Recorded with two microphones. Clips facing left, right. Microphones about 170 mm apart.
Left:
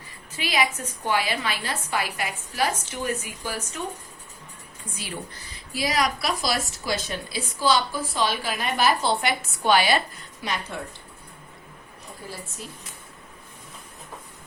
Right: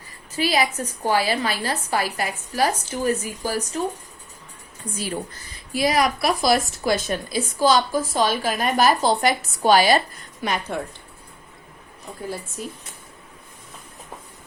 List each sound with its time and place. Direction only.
0.3 s a woman's voice: 40° right (ahead or behind)
5.7 s a woman's voice: 55° right (ahead or behind)
10.4 s a woman's voice: 50° right (ahead or behind)